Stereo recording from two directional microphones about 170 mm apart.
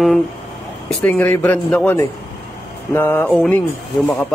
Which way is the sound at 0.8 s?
10° left (ahead or behind).